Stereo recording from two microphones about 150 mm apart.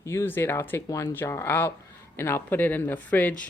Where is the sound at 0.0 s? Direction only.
15° left (ahead or behind).